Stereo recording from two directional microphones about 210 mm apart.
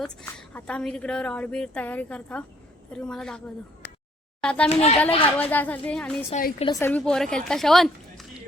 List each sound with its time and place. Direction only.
0.0 s a woman's voice: 5° left (ahead or behind)
4.4 s a woman's voice: 5° left (ahead or behind)
4.7 s speech: 30° left (ahead or behind)
5.4 s speech: 5° left (ahead or behind)
6.3 s a woman's voice: 35° left (ahead or behind)
6.7 s a woman's voice: 10° left (ahead or behind)